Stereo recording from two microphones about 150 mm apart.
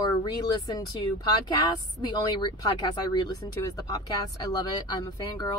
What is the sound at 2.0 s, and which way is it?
Speech, 30° left (ahead or behind).